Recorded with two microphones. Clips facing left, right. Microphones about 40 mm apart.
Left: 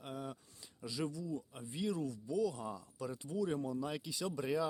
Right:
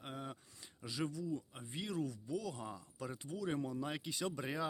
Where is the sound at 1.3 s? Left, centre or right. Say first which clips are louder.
Even; right.